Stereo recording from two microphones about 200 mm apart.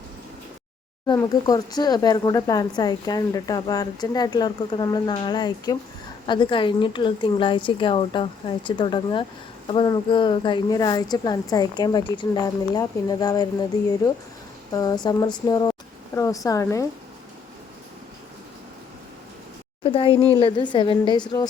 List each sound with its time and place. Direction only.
1.0 s speech: 20° left (ahead or behind)
19.8 s speech: 25° left (ahead or behind)